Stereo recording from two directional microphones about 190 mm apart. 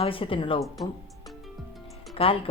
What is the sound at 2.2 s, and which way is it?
Speech, 30° left (ahead or behind).